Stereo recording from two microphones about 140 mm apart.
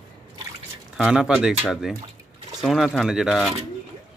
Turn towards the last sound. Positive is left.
turn(degrees=0)  # may be behind; listen again after turning